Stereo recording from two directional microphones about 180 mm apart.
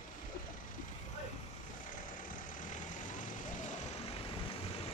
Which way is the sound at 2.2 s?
50° left (ahead or behind).